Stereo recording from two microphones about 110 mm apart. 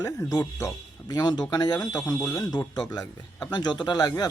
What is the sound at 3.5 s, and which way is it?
Speech, 40° left (ahead or behind).